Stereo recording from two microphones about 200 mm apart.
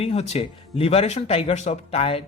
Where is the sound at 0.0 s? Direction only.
35° left (ahead or behind).